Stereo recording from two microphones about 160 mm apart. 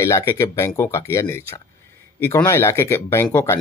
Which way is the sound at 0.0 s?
15° left (ahead or behind).